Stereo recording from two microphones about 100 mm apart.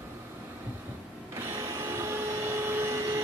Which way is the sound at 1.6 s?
30° right (ahead or behind).